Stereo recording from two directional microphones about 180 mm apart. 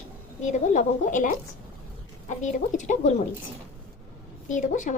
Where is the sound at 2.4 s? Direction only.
45° left (ahead or behind).